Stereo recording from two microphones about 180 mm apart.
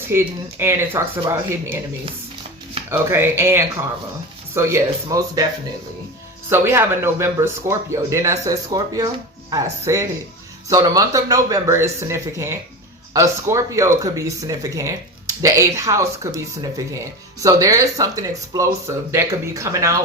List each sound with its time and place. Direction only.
0.1 s speech: 15° right (ahead or behind)
2.9 s speech: 15° right (ahead or behind)
6.5 s speech: 15° right (ahead or behind)